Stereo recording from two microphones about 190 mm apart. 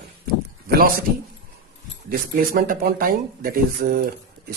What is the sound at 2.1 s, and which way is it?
Speech, 50° right (ahead or behind).